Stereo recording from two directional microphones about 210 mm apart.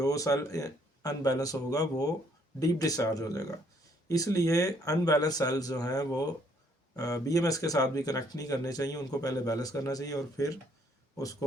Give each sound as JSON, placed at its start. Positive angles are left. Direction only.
{"t": 0.0, "sound": "speech", "side_deg": 15}